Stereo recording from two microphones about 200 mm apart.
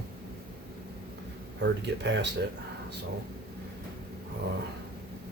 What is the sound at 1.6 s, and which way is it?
Speech, 60° right (ahead or behind).